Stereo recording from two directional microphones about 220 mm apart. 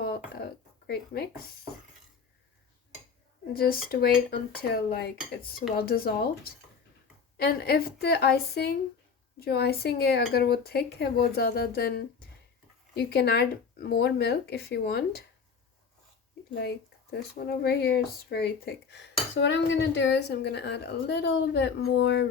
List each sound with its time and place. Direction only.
0.3 s speech: 45° left (ahead or behind)
3.5 s speech: 40° left (ahead or behind)
16.6 s speech: 50° left (ahead or behind)